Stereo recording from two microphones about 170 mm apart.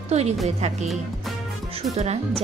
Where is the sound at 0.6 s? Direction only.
40° right (ahead or behind).